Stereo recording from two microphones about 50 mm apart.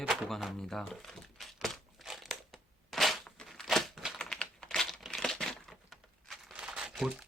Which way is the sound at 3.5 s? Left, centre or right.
Centre.